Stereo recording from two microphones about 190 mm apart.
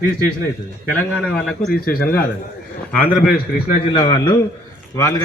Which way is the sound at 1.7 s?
50° left (ahead or behind).